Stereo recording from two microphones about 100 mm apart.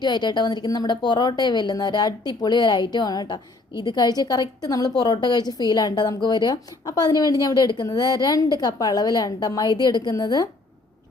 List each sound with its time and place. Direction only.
0.0 s a woman's voice: 50° left (ahead or behind)